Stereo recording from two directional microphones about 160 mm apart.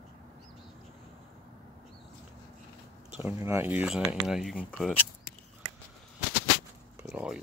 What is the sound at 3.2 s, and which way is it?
Speech, 15° right (ahead or behind).